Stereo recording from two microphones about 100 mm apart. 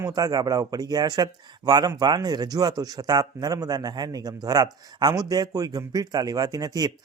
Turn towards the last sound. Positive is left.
turn(degrees=-40)  # may be behind; listen again after turning